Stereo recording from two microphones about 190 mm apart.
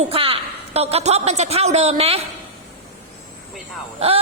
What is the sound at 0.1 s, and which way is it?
A woman's voice, 30° right (ahead or behind).